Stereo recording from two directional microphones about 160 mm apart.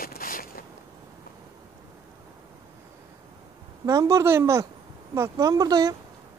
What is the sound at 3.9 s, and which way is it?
Speech, 20° right (ahead or behind).